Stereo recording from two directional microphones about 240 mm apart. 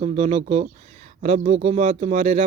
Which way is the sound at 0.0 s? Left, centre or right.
Right.